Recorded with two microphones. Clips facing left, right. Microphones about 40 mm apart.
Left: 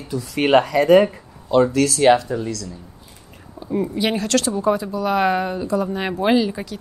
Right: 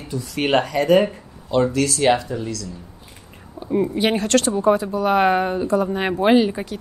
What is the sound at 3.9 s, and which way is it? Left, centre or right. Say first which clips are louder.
Speech: right 1 dB; right.